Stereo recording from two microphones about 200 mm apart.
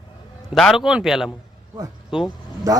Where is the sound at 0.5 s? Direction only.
Centre (ahead or behind).